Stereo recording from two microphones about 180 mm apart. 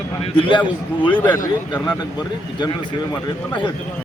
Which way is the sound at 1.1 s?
10° left (ahead or behind).